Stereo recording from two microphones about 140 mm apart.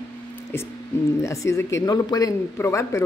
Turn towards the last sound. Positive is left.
turn(degrees=20)  # may be behind; listen again after turning